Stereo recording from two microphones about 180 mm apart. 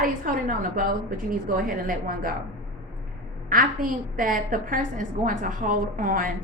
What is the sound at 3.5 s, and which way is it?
A woman's voice, 50° right (ahead or behind).